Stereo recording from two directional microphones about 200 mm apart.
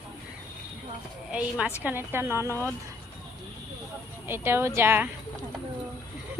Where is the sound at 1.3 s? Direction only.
5° right (ahead or behind).